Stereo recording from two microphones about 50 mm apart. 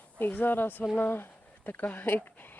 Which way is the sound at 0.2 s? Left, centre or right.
Left.